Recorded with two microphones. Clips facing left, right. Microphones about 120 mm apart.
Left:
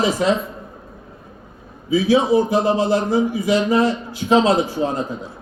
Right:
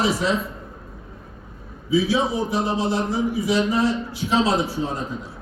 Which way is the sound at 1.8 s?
60° left (ahead or behind).